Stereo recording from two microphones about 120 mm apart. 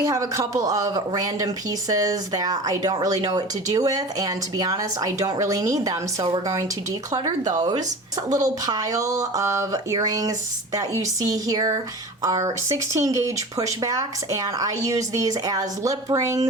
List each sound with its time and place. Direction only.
0.0 s speech: 25° right (ahead or behind)
7.1 s speech: 30° right (ahead or behind)